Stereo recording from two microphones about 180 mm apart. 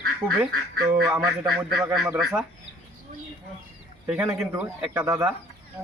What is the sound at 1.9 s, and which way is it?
Speech, centre (ahead or behind).